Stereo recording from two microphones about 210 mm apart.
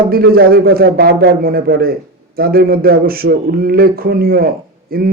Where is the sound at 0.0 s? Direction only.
45° right (ahead or behind).